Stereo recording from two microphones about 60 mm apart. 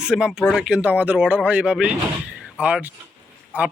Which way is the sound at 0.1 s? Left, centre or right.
Centre.